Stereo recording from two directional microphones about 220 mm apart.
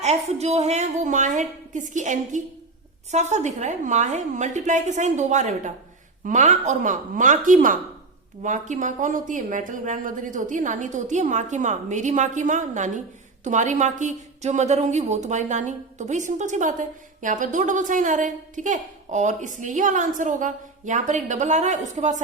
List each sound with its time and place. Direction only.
0.0 s a woman's voice: 30° right (ahead or behind)